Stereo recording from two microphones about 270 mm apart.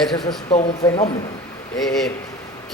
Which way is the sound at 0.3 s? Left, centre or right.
Left.